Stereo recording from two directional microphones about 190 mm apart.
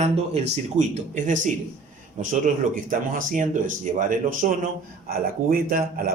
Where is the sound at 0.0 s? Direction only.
35° right (ahead or behind).